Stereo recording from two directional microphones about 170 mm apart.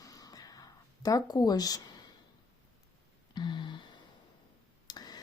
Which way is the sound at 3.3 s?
25° left (ahead or behind).